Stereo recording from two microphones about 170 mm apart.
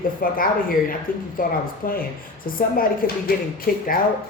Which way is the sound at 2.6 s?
55° left (ahead or behind).